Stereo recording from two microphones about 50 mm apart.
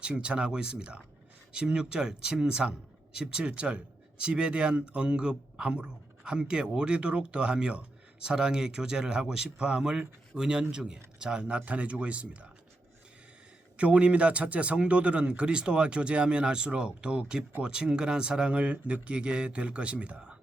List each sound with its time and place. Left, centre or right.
0.0 s speech: right
13.7 s speech: right